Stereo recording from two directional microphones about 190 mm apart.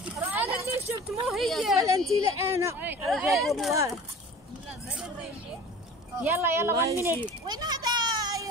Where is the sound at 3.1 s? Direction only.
Centre (ahead or behind).